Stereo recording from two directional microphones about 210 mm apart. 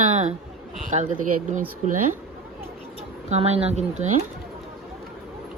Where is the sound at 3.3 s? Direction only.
30° right (ahead or behind).